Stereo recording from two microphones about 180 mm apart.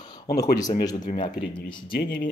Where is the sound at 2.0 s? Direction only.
80° left.